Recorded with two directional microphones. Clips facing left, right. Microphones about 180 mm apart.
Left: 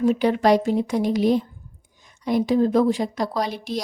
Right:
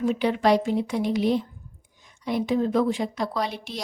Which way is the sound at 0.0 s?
40° left (ahead or behind).